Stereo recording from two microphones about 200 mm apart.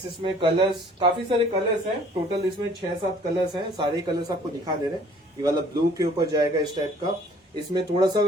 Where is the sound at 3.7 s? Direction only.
20° right (ahead or behind).